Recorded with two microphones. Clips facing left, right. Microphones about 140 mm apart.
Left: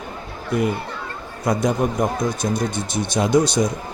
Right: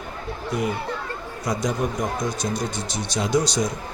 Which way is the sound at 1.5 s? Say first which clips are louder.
Left 5 dB; 55° left (ahead or behind).